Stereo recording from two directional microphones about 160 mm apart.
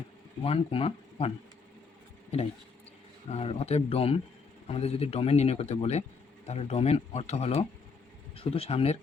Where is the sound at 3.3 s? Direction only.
40° left (ahead or behind).